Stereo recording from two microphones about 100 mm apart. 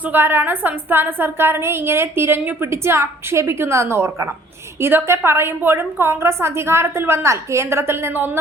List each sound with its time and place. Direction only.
0.0 s a woman's voice: 20° right (ahead or behind)